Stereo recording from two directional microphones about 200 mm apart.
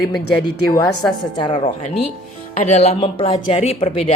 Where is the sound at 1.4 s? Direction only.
25° left (ahead or behind).